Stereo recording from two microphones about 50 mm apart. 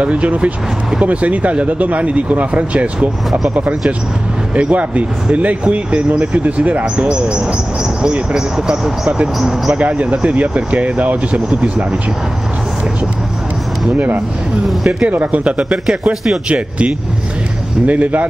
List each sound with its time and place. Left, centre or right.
0.0 s speech: right
13.9 s speech: right
15.7 s speech: centre
16.4 s speech: right